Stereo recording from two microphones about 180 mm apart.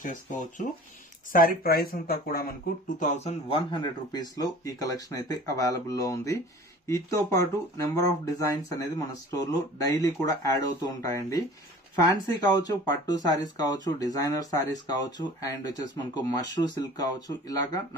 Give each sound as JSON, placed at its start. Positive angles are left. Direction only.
{"t": 1.3, "sound": "speech", "side_deg": 50}
{"t": 3.0, "sound": "speech", "side_deg": 40}